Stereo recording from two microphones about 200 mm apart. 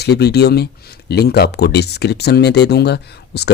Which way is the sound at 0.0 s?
55° left (ahead or behind).